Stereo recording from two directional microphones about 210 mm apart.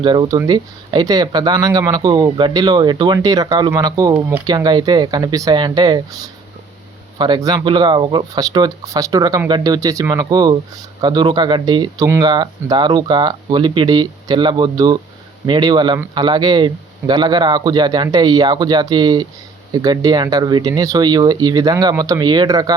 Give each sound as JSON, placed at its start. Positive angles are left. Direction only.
{"t": 0.0, "sound": "speech", "side_deg": -20}
{"t": 7.2, "sound": "speech", "side_deg": -20}